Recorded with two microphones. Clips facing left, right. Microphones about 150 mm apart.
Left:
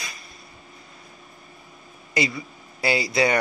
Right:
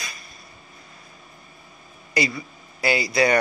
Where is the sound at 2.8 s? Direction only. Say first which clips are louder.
Right 1 dB; 30° left (ahead or behind).